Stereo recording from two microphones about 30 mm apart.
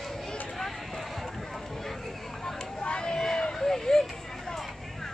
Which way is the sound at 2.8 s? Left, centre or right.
Left.